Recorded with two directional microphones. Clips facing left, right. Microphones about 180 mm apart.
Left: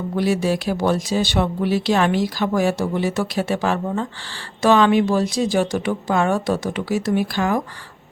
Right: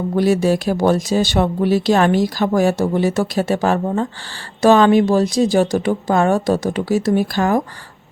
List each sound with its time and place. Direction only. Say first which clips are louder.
0.2 s speech: right 4 dB; 45° right (ahead or behind)